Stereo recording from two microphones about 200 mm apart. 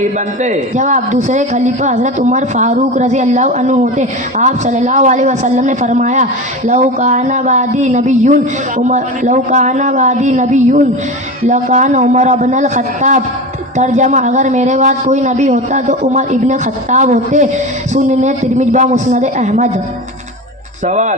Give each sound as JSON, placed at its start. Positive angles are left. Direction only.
{"t": 0.0, "sound": "a man's voice", "side_deg": -40}
{"t": 20.8, "sound": "a man's voice", "side_deg": -35}